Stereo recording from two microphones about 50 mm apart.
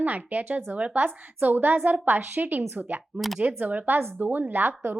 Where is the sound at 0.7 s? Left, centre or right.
Right.